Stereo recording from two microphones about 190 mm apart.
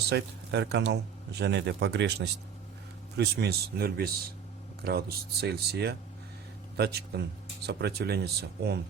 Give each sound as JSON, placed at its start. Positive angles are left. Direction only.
{"t": 0.1, "sound": "speech", "side_deg": -60}